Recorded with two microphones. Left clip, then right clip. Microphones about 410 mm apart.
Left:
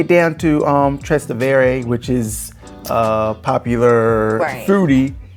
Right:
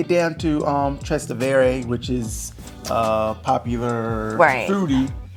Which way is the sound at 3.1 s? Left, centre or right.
Left.